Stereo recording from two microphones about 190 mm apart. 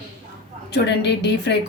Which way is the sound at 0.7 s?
60° left (ahead or behind).